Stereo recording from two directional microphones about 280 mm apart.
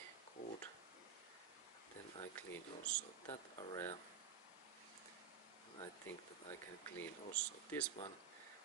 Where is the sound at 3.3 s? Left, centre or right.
Centre.